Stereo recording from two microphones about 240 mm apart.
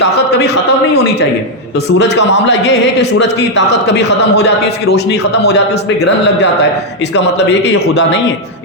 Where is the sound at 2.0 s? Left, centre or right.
Left.